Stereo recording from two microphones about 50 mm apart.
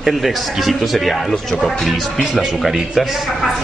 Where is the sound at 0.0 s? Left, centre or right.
Centre.